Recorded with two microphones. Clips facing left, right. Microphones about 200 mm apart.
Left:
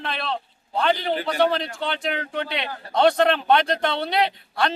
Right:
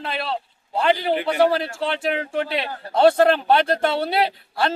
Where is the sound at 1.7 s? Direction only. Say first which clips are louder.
Right 3 dB; 30° right (ahead or behind).